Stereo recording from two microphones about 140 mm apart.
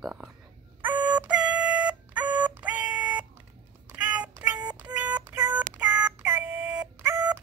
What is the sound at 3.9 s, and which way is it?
Child singing, 10° right (ahead or behind).